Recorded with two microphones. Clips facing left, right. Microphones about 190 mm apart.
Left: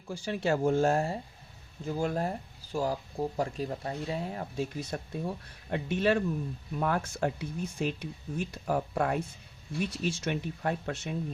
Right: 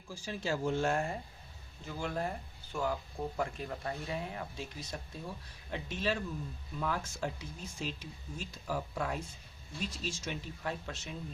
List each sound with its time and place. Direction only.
0.1 s speech: 70° left (ahead or behind); by 4.4 s 30° left (ahead or behind)
4.5 s speech: 60° left (ahead or behind)